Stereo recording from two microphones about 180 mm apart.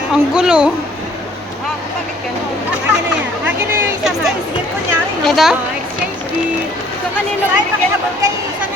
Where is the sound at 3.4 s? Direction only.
10° right (ahead or behind).